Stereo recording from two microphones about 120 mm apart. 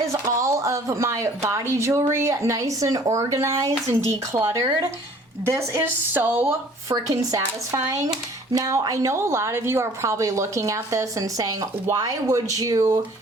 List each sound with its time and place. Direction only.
0.1 s speech: 25° right (ahead or behind)
6.9 s speech: 30° right (ahead or behind)